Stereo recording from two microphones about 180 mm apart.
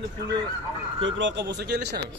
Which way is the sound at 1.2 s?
70° right (ahead or behind).